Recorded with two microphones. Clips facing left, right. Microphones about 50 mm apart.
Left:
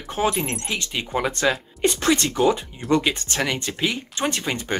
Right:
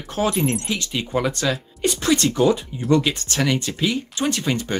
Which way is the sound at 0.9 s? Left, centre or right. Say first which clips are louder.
Right 2 dB; centre.